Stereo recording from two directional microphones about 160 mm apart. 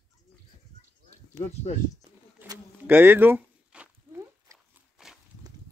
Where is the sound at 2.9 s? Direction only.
10° right (ahead or behind).